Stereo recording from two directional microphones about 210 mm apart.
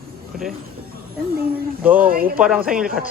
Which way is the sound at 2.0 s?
45° right (ahead or behind).